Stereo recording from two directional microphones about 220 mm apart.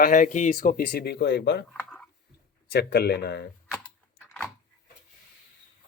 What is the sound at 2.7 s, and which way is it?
Speech, 50° left (ahead or behind).